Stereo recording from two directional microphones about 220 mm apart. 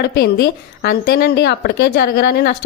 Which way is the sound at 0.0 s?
45° left (ahead or behind).